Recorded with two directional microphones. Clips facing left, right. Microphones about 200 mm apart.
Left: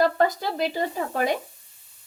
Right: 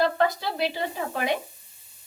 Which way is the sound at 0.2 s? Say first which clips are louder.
Left 2 dB; 45° left (ahead or behind).